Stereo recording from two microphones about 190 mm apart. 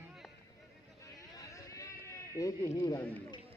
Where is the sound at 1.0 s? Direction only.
15° left (ahead or behind).